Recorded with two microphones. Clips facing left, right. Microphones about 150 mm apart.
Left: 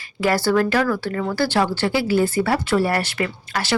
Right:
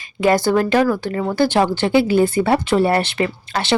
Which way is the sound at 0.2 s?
20° right (ahead or behind).